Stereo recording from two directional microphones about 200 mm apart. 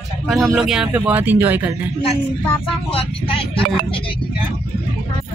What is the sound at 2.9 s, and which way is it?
Speech, 30° left (ahead or behind).